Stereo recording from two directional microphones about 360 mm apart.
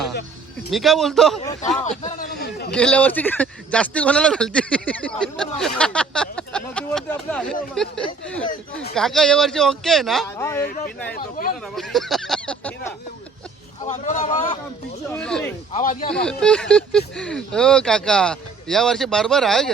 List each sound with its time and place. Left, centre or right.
0.7 s speech: centre
1.4 s speech: centre
2.7 s speech: centre
11.1 s speech: left
11.7 s speech: centre
13.8 s speech: centre
15.1 s speech: centre
15.7 s speech: left
16.1 s speech: centre